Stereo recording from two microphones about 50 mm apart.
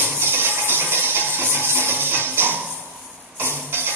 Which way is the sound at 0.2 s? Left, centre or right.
Right.